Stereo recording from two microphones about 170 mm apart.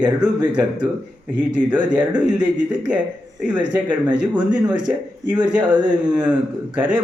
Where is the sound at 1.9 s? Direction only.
5° right (ahead or behind).